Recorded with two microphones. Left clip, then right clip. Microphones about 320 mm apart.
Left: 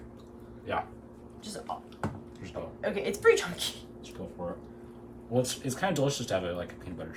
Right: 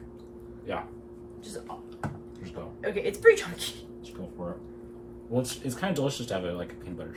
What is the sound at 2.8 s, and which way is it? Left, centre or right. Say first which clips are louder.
Speech: right 4 dB; centre.